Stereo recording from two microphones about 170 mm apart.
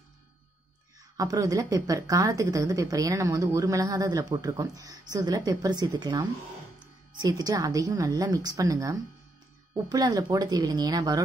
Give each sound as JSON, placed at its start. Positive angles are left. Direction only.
{"t": 1.1, "sound": "a woman's voice", "side_deg": -20}